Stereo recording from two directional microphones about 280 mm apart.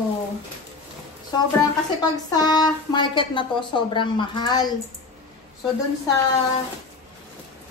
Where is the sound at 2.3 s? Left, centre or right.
Centre.